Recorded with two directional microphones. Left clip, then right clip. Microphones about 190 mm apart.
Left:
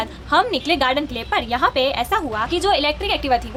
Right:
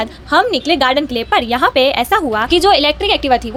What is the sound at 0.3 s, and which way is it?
A woman's voice, 20° right (ahead or behind).